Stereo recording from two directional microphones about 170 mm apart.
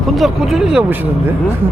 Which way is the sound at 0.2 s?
Centre (ahead or behind).